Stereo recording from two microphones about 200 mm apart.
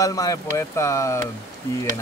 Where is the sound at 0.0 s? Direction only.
15° left (ahead or behind).